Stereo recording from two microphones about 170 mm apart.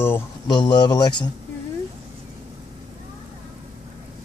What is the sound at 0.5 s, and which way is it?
Speech, 25° left (ahead or behind).